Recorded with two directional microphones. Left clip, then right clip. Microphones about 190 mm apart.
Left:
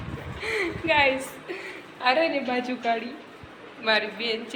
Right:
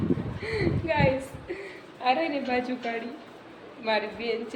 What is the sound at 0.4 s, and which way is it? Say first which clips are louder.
Speech: left 3 dB; centre (ahead or behind).